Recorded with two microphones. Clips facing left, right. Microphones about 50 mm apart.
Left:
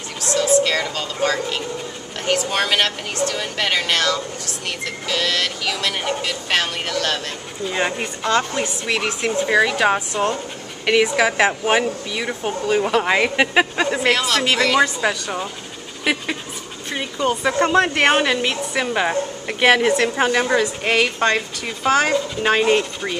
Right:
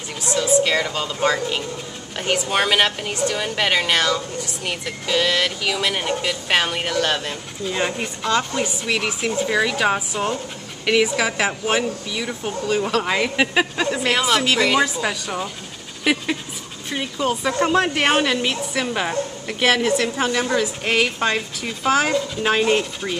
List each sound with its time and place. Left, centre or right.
0.2 s a sound: centre
0.7 s speech: centre
7.6 s speech: centre
9.9 s speech: centre
10.9 s speech: centre
14.1 s speech: centre
14.8 s speech: centre
16.0 s dog: centre
16.9 s speech: centre
19.9 s a woman's voice: left
20.8 s speech: centre